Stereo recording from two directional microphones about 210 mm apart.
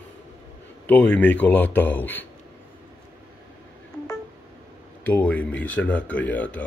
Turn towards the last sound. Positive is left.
turn(degrees=5)  # may be behind; listen again after turning